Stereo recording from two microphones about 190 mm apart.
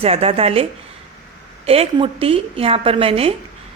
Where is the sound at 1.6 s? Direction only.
30° right (ahead or behind).